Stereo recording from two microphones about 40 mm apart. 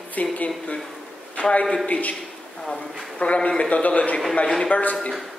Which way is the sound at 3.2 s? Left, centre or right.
Left.